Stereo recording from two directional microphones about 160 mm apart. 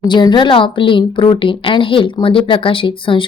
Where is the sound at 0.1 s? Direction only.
30° left (ahead or behind).